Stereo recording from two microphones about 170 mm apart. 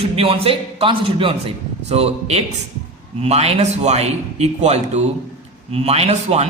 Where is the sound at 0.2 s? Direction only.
35° right (ahead or behind).